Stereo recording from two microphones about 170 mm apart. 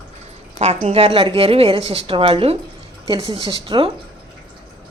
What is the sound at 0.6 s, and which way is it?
A woman's voice, 40° right (ahead or behind).